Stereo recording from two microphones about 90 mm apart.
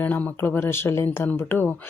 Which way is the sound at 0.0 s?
15° left (ahead or behind).